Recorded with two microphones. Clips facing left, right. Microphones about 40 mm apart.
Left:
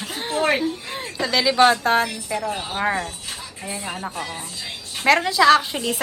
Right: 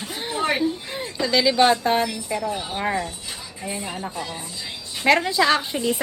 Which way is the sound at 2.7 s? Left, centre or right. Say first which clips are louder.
Left 4 dB; centre.